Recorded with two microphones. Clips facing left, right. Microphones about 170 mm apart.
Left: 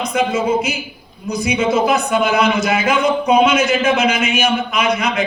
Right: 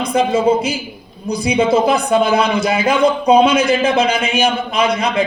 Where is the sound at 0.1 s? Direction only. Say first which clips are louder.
Right 4 dB; 30° right (ahead or behind).